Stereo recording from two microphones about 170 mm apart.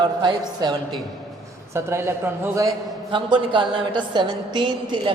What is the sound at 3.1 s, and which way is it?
A man's voice, 30° right (ahead or behind).